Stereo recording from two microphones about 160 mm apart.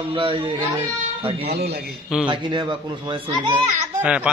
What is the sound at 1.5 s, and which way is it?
Speech, 90° right.